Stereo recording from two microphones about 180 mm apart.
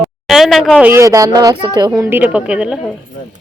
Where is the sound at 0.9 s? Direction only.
15° right (ahead or behind).